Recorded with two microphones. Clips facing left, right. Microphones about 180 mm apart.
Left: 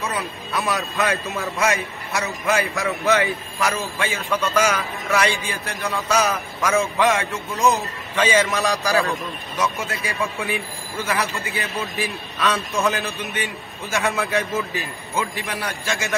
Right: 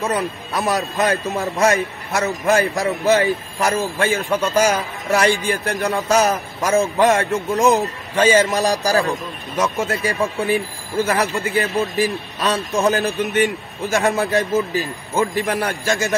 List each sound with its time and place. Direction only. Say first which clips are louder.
0.0 s a man's voice: right 6 dB; 35° right (ahead or behind)